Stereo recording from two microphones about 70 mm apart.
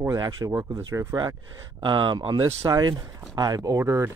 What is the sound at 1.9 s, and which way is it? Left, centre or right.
Speech, right.